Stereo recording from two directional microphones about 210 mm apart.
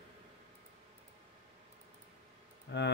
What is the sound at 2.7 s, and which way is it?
Speech, 55° left (ahead or behind).